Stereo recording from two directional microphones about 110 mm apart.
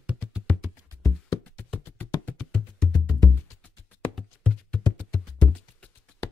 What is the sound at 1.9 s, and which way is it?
Music, 20° left (ahead or behind).